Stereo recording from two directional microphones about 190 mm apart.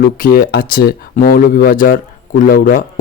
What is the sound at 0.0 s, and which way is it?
A man's voice, 50° left (ahead or behind).